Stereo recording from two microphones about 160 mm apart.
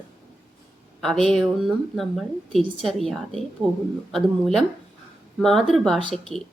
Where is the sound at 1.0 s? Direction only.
5° left (ahead or behind).